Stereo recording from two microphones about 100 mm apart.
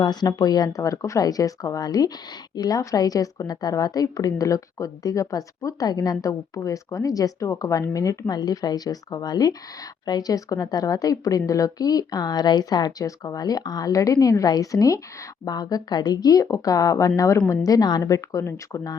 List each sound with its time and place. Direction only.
0.0 s a woman's voice: 45° left (ahead or behind)